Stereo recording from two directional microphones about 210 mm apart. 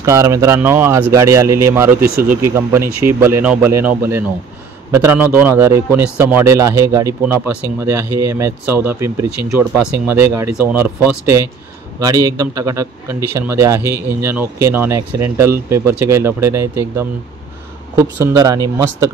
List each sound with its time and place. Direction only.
0.0 s a man's voice: 15° right (ahead or behind)
18.2 s a man's voice: 15° right (ahead or behind)